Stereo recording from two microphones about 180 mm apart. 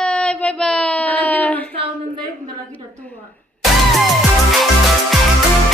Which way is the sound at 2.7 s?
10° left (ahead or behind).